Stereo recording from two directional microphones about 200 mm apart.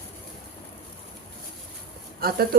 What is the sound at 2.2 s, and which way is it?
Speech, 50° right (ahead or behind).